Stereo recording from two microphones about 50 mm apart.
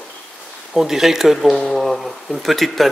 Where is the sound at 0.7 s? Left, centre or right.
Centre.